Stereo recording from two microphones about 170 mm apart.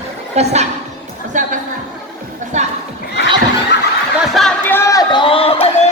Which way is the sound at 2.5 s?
45° right (ahead or behind).